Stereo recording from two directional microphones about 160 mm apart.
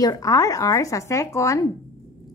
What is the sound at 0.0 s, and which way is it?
A woman's voice, 20° left (ahead or behind).